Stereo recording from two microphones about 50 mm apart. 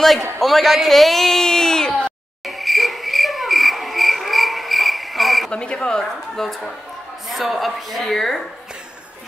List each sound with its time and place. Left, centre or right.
0.4 s speech: centre
2.4 s cricket: centre
5.5 s speech: centre